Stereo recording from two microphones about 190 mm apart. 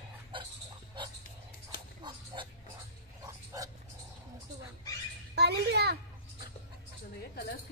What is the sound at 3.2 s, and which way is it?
Dog, 15° right (ahead or behind).